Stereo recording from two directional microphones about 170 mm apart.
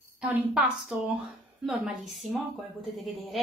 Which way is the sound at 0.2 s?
10° right (ahead or behind).